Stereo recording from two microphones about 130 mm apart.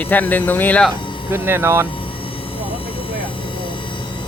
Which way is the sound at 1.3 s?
20° right (ahead or behind).